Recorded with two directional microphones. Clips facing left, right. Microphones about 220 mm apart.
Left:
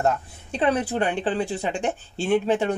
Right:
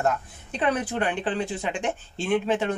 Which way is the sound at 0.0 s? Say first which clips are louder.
Left 2 dB; 30° left (ahead or behind).